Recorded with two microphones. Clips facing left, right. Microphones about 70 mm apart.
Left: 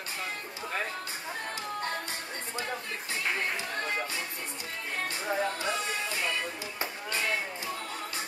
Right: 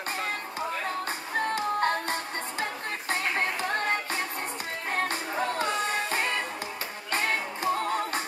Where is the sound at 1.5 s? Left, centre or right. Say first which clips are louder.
Right 8 dB; right.